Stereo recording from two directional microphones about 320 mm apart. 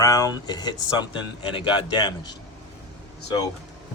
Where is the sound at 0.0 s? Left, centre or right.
Centre.